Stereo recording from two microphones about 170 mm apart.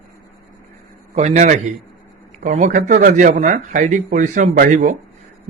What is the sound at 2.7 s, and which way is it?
A man's voice, 50° right (ahead or behind).